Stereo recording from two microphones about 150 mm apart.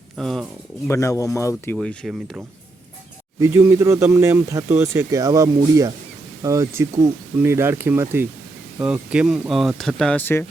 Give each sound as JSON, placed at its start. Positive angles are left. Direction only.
{"t": 0.2, "sound": "speech", "side_deg": 0}
{"t": 0.9, "sound": "speech", "side_deg": 20}
{"t": 3.4, "sound": "speech", "side_deg": -20}